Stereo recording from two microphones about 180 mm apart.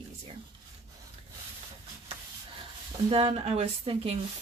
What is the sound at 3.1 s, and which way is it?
Speech, 30° right (ahead or behind).